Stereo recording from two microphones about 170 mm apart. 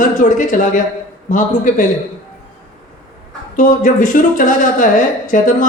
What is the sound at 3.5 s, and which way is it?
A man's voice, 50° left (ahead or behind).